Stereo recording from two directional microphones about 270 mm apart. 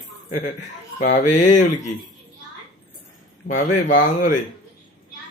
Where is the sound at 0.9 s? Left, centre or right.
Left.